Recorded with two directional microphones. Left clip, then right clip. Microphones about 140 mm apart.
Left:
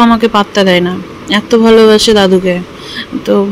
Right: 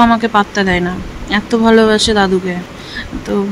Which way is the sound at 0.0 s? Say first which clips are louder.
Left 2 dB; 25° left (ahead or behind).